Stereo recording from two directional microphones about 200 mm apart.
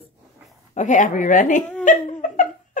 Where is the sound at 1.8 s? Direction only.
40° left (ahead or behind).